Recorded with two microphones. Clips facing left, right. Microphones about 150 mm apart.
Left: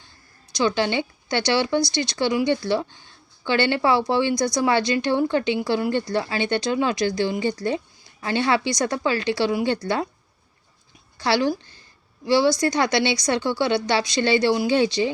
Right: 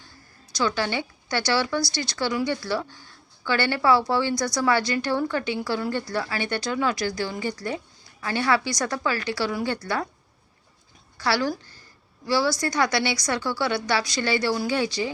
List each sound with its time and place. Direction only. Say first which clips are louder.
0.5 s speech: left 4 dB; 20° left (ahead or behind)
11.2 s speech: left 3 dB; 20° left (ahead or behind)